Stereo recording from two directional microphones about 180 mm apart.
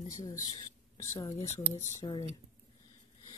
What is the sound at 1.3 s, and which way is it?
Speech, 35° left (ahead or behind).